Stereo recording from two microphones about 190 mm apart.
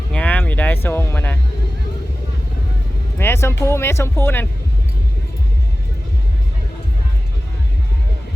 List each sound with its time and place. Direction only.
0.1 s music: 5° left (ahead or behind)
3.2 s music: 10° left (ahead or behind)
3.6 s speech: 15° left (ahead or behind)